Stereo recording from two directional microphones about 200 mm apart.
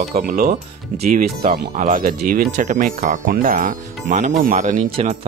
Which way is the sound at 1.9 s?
45° right (ahead or behind).